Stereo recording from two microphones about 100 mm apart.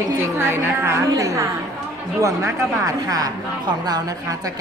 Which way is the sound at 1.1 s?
35° right (ahead or behind).